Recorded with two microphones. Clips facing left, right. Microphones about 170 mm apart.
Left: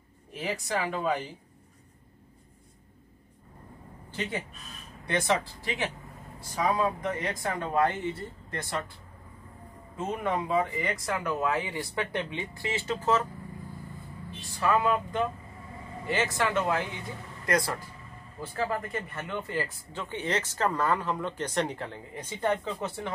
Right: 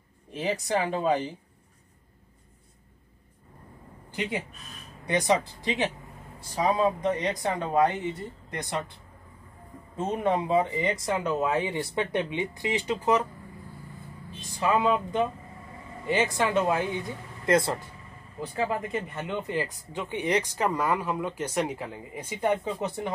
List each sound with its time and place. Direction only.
0.3 s speech: 20° right (ahead or behind)
4.1 s speech: 10° right (ahead or behind)
10.2 s speech: 25° right (ahead or behind)
14.4 s speech: 20° right (ahead or behind)